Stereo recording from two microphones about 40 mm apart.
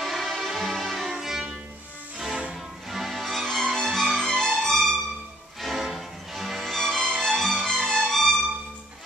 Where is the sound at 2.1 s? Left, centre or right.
Centre.